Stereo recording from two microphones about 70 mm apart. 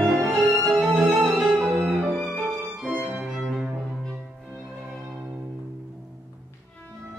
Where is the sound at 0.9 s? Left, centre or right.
Centre.